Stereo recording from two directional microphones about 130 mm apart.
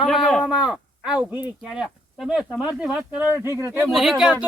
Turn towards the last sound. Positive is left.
turn(degrees=-5)  # may be behind; listen again after turning